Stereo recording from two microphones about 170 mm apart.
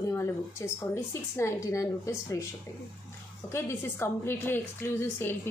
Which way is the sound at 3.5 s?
15° left (ahead or behind).